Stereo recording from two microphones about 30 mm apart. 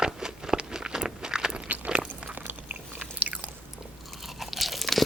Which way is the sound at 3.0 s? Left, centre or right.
Right.